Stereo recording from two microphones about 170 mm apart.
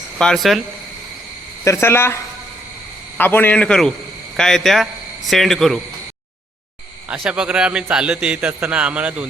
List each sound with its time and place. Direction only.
0.2 s speech: centre (ahead or behind)
1.6 s a man's voice: 15° left (ahead or behind)
7.1 s a man's voice: 5° right (ahead or behind)